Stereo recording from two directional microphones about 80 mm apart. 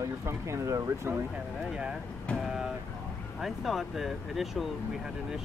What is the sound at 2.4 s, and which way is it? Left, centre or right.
Vehicle, centre.